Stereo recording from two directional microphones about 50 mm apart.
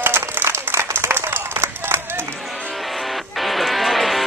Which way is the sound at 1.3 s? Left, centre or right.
Right.